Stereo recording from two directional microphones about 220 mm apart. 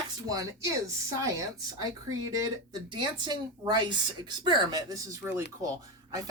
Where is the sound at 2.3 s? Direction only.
15° right (ahead or behind).